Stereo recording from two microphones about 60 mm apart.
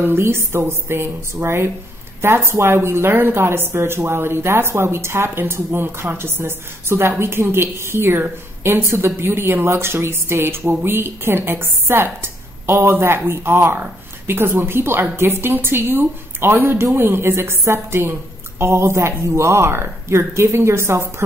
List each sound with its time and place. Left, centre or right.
0.0 s a woman's voice: right